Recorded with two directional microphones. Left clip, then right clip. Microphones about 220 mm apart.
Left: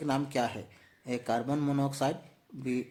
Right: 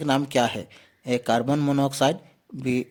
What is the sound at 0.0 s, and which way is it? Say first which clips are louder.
Speech: right 9 dB; 40° right (ahead or behind).